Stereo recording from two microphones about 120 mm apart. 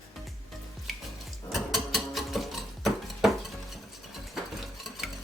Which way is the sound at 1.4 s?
Centre (ahead or behind).